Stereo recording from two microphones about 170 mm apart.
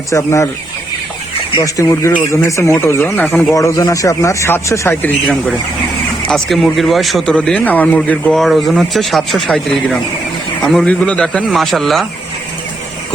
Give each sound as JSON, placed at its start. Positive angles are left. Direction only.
{"t": 0.1, "sound": "speech", "side_deg": 15}
{"t": 1.5, "sound": "speech", "side_deg": 20}